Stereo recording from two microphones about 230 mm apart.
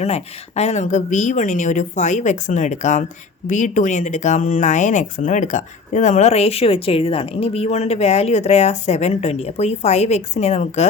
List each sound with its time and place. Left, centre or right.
0.0 s speech: left